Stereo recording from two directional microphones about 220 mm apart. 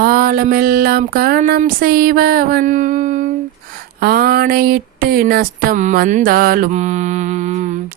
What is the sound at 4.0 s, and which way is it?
Speech, 45° right (ahead or behind).